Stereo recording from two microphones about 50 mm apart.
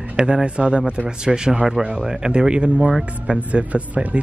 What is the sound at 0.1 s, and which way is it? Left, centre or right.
Speech, centre.